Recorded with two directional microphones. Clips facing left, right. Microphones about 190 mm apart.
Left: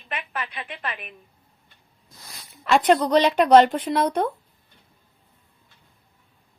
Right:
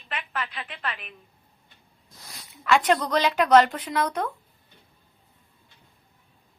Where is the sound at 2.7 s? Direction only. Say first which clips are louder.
Left 5 dB; 30° left (ahead or behind).